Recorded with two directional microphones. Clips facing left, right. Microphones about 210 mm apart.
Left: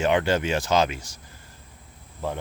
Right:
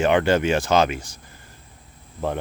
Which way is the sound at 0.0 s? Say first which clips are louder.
Right 4 dB; 60° right (ahead or behind).